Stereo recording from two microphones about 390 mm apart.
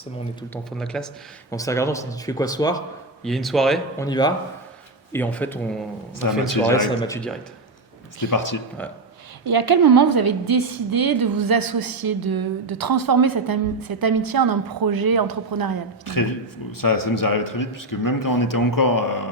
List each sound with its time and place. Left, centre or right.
0.5 s speech: centre
6.2 s a man's voice: left
6.7 s speech: centre
8.3 s speech: left
9.5 s a woman's voice: right
16.0 s speech: left